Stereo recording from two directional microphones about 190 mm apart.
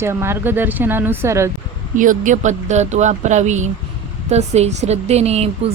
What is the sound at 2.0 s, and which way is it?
A woman's voice, 45° right (ahead or behind).